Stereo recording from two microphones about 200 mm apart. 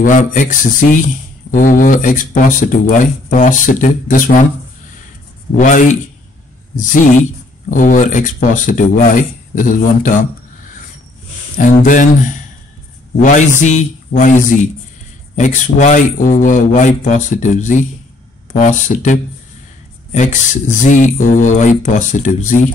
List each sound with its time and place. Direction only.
0.0 s a man's voice: 40° left (ahead or behind)
5.6 s a man's voice: 40° left (ahead or behind)
11.5 s a man's voice: 40° left (ahead or behind)